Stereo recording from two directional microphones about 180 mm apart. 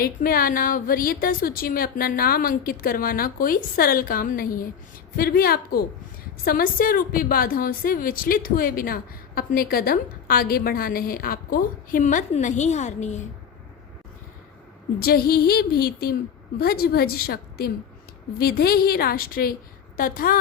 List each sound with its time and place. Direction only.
0.0 s a woman's voice: 55° left (ahead or behind)
14.9 s a woman's voice: 55° left (ahead or behind)